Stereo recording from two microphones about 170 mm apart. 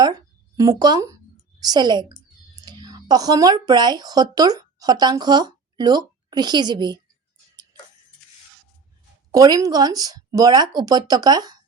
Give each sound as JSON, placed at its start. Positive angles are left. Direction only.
{"t": 0.0, "sound": "speech", "side_deg": -20}
{"t": 9.3, "sound": "speech", "side_deg": -20}